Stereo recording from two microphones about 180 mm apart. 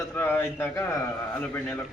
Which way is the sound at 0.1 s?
10° left (ahead or behind).